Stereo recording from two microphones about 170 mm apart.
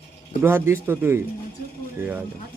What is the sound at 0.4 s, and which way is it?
Speech, 15° right (ahead or behind).